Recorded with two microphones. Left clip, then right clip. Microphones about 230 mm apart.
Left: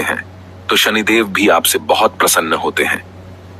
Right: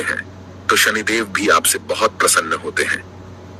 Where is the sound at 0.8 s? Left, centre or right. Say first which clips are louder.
Left 4 dB; left.